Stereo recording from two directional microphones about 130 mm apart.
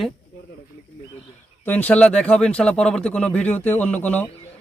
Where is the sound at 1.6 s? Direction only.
15° left (ahead or behind).